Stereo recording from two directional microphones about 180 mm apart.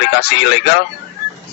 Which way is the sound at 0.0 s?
70° left (ahead or behind).